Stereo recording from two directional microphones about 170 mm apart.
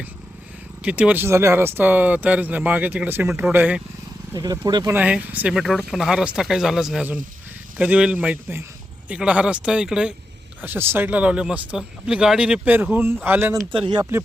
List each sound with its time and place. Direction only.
0.8 s speech: 10° right (ahead or behind)
4.3 s speech: 20° right (ahead or behind)
4.9 s speech: 10° right (ahead or behind)
13.7 s speech: 30° right (ahead or behind)